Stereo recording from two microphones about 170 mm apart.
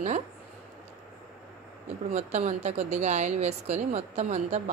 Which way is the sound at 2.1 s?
45° right (ahead or behind).